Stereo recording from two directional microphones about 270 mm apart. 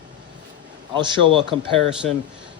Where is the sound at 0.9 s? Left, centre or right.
Centre.